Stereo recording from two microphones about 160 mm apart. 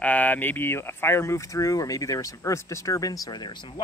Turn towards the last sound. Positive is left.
turn(degrees=25)  # may be behind; listen again after turning